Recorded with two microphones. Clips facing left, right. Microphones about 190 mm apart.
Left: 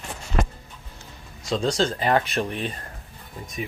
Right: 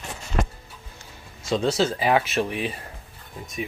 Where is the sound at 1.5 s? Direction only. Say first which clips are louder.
Right 1 dB; 5° right (ahead or behind).